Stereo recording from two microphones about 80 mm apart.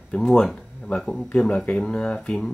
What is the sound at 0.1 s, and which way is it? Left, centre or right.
Speech, centre.